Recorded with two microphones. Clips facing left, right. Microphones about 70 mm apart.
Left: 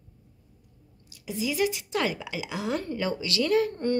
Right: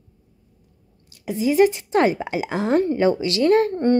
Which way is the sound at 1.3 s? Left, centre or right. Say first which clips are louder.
Right 10 dB; right.